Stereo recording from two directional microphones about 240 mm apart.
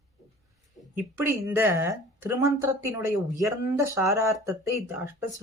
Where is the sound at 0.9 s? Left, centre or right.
Centre.